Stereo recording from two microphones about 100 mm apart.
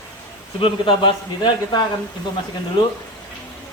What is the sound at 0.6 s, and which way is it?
Speech, 55° left (ahead or behind).